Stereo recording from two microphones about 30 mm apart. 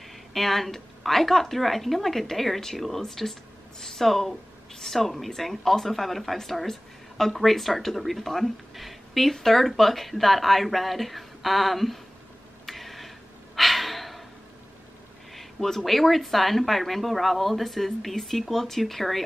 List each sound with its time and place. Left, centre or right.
0.3 s speech: centre
12.6 s a sound: centre
13.6 s gasp: centre
15.3 s speech: centre